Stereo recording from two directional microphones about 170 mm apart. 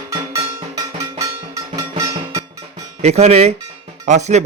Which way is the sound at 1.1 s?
20° right (ahead or behind).